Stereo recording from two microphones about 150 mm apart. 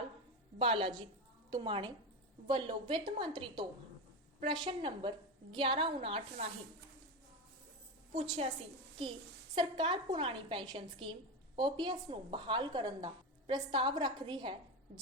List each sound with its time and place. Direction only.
0.6 s a woman's voice: 35° right (ahead or behind)
9.6 s a woman's voice: 30° right (ahead or behind)